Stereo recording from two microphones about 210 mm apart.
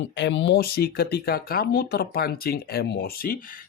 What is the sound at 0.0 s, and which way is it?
Speech, 60° left (ahead or behind).